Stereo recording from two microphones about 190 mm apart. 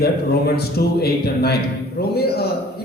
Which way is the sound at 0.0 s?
55° left (ahead or behind).